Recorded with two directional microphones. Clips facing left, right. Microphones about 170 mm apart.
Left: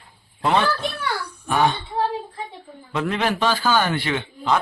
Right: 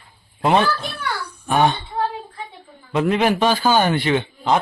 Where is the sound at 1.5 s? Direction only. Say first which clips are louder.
Right 2 dB; 20° right (ahead or behind).